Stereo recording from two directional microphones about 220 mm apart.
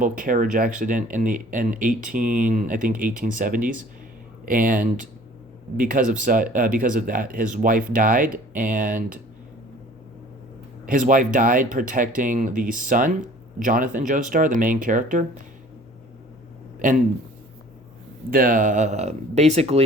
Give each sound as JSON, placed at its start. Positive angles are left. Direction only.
{"t": 0.0, "sound": "speech", "side_deg": -35}
{"t": 10.8, "sound": "speech", "side_deg": -35}
{"t": 18.3, "sound": "speech", "side_deg": -40}